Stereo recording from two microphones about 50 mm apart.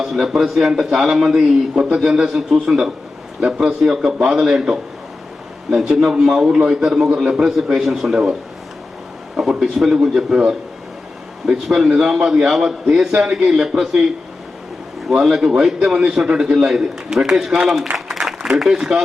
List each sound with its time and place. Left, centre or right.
0.0 s a man's voice: centre
0.7 s a man's voice: centre
9.3 s a man's voice: centre
15.1 s a man's voice: centre